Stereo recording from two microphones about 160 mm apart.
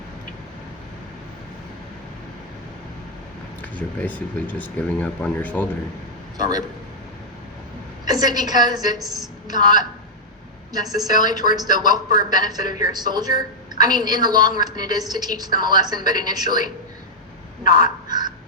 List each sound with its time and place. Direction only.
3.6 s speech: 10° left (ahead or behind)
6.3 s a man's voice: 25° right (ahead or behind)
8.0 s a woman's voice: 25° right (ahead or behind)
18.1 s crow: 25° right (ahead or behind)